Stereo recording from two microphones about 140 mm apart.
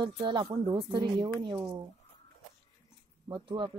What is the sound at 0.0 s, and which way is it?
Speech, 35° right (ahead or behind).